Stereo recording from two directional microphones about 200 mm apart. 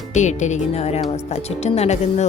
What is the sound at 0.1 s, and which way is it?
Speech, 35° left (ahead or behind).